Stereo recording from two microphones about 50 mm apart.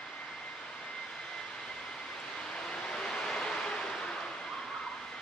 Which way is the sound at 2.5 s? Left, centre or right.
Centre.